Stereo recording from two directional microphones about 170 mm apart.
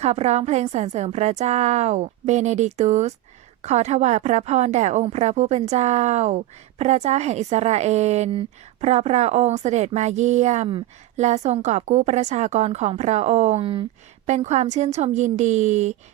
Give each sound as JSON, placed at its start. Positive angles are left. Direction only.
{"t": 0.0, "sound": "a woman's voice", "side_deg": -40}
{"t": 14.3, "sound": "a woman's voice", "side_deg": -45}